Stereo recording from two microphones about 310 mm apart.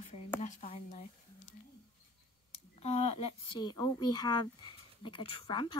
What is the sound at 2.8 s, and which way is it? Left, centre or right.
A woman's voice, centre.